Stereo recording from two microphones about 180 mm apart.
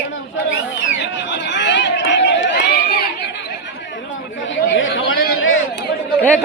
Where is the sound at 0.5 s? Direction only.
90° left.